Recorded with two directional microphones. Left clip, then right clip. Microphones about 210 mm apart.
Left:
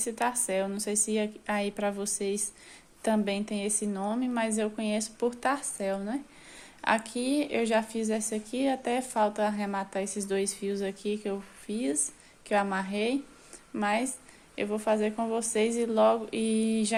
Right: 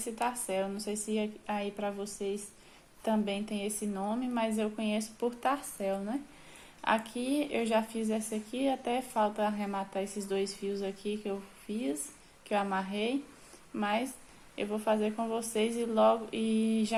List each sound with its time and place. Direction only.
0.0 s speech: 25° left (ahead or behind)